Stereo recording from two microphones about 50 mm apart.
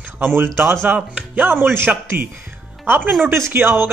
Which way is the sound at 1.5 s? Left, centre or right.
Right.